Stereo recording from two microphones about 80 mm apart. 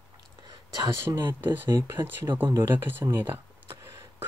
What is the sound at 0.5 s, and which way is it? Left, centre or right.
Whispering, right.